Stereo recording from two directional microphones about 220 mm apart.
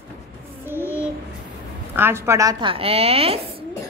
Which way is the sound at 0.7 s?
10° right (ahead or behind).